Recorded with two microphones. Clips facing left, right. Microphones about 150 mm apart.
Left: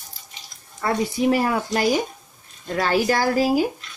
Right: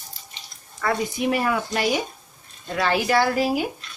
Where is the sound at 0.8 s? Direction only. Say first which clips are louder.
Left 2 dB; 30° left (ahead or behind).